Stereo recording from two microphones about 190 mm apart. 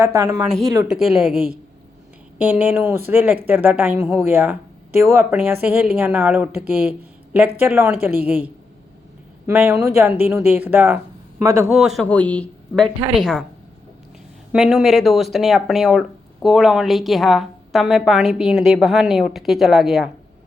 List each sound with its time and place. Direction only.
0.0 s speech: 15° right (ahead or behind)
0.9 s speech: centre (ahead or behind)
2.4 s speech: 10° right (ahead or behind)
8.0 s speech: 10° right (ahead or behind)
9.5 s speech: 10° right (ahead or behind)
11.7 s speech: centre (ahead or behind)
14.5 s speech: 5° right (ahead or behind)